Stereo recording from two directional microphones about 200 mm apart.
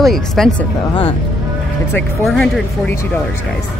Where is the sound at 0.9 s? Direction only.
25° left (ahead or behind).